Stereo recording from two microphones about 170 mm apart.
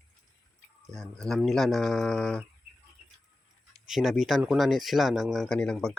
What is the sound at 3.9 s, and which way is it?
Speech, centre (ahead or behind).